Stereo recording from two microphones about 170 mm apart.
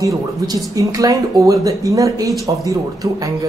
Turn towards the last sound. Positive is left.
turn(degrees=-20)  # may be behind; listen again after turning